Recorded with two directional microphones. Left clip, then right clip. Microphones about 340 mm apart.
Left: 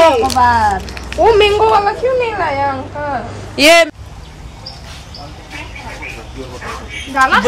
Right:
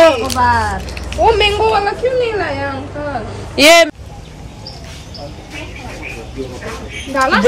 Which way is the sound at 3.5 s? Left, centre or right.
Centre.